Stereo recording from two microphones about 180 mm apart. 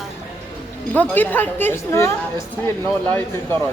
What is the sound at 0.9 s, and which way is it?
A woman's voice, 10° left (ahead or behind).